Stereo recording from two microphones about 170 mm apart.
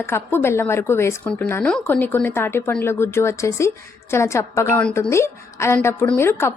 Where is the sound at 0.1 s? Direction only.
15° left (ahead or behind).